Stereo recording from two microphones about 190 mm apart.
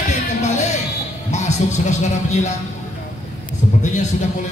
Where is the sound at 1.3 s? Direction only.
35° left (ahead or behind).